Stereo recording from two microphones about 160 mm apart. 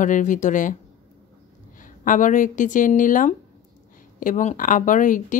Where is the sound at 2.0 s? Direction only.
55° left (ahead or behind).